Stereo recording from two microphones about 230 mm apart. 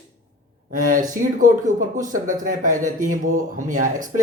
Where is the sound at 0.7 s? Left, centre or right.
Right.